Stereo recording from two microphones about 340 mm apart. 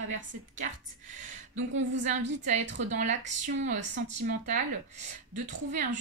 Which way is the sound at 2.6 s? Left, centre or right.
Right.